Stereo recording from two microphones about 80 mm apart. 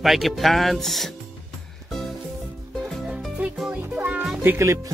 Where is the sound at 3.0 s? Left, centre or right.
Centre.